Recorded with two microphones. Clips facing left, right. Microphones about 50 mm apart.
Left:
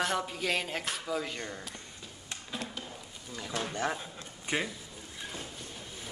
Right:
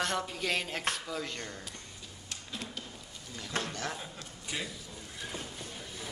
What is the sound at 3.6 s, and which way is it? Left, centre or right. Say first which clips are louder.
Speech: left 5 dB; centre.